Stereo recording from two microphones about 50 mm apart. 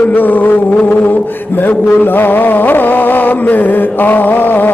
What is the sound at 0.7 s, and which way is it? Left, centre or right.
Mantra, left.